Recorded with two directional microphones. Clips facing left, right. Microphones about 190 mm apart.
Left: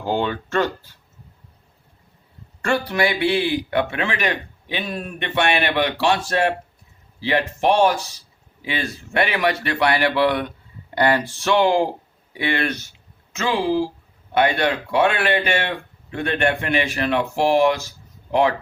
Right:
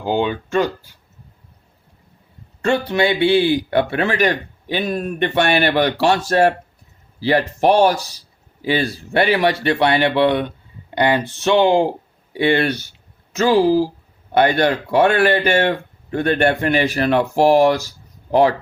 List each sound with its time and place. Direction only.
0.0 s speech: 15° right (ahead or behind)
2.6 s speech: 25° right (ahead or behind)